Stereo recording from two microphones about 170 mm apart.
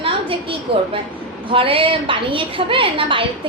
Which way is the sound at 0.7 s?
30° right (ahead or behind).